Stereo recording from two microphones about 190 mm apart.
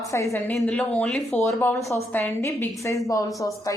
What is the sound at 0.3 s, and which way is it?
A woman's voice, 5° left (ahead or behind).